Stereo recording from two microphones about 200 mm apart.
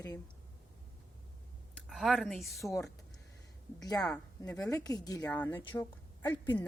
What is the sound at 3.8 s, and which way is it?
Speech, 20° left (ahead or behind).